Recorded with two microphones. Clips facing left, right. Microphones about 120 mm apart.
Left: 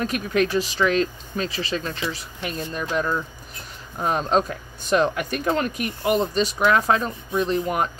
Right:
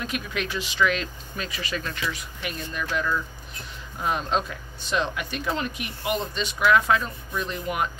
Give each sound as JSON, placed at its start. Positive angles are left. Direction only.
{"t": 0.0, "sound": "speech", "side_deg": 40}